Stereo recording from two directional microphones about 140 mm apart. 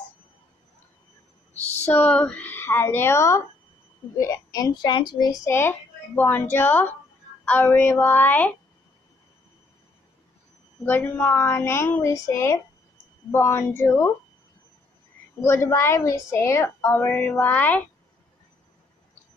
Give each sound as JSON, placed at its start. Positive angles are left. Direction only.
{"t": 1.9, "sound": "a child's voice", "side_deg": 10}
{"t": 10.9, "sound": "a child's voice", "side_deg": 10}
{"t": 15.4, "sound": "a child's voice", "side_deg": 20}